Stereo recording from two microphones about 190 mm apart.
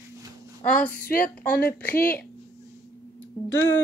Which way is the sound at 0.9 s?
50° left (ahead or behind).